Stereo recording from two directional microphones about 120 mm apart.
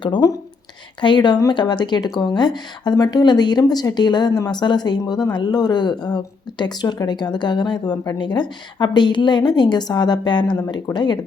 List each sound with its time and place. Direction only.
0.0 s a woman's voice: 35° left (ahead or behind)